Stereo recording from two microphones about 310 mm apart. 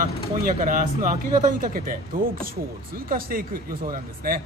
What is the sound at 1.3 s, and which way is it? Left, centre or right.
Speech, right.